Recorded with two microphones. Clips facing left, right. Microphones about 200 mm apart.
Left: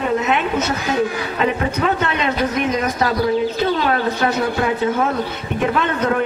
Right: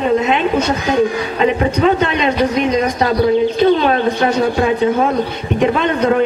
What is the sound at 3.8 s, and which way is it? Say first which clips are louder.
A man's voice: right 4 dB; 25° right (ahead or behind).